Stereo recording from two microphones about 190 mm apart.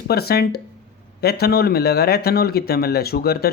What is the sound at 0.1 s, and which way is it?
Speech, 55° left (ahead or behind).